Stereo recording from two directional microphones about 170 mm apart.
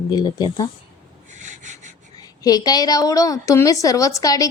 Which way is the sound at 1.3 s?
45° right (ahead or behind).